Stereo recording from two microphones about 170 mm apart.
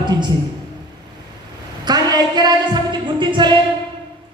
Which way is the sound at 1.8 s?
25° right (ahead or behind).